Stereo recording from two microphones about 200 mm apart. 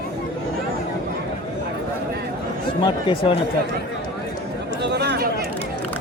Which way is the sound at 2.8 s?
25° left (ahead or behind).